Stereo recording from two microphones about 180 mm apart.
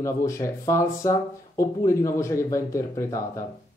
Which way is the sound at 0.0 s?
15° left (ahead or behind).